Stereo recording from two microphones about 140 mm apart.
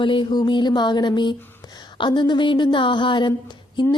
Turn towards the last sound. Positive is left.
turn(degrees=30)  # may be behind; listen again after turning